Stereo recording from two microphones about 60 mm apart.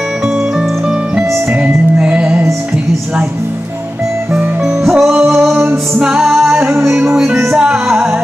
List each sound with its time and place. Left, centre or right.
0.6 s music: centre
4.6 s music: centre
5.0 s music: right
5.3 s music: centre